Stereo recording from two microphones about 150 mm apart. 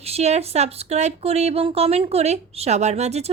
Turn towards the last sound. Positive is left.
turn(degrees=-45)  # may be behind; listen again after turning